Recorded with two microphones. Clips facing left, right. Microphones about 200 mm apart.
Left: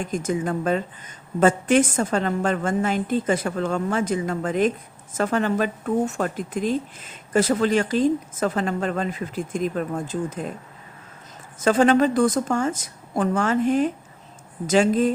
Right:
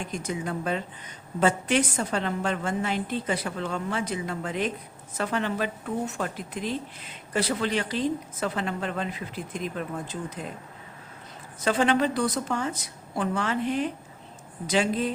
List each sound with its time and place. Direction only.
0.0 s a woman's voice: 50° left (ahead or behind)
11.6 s a woman's voice: 45° left (ahead or behind)